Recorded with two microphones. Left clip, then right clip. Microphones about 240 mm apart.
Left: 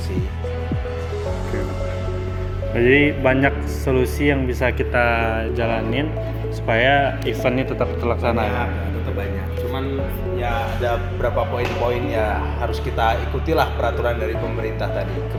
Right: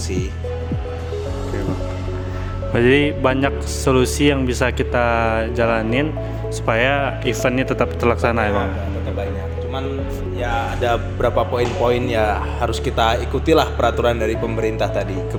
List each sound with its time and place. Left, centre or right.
2.7 s speech: right
10.8 s speech: right